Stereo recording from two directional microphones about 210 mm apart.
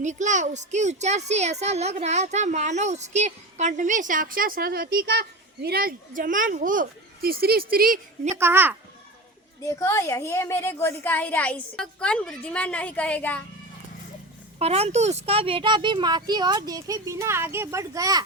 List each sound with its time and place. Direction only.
0.0 s a woman's voice: 35° right (ahead or behind)
8.4 s a child's voice: 10° right (ahead or behind)
9.6 s a woman's voice: 15° left (ahead or behind)
14.6 s speech: 30° right (ahead or behind)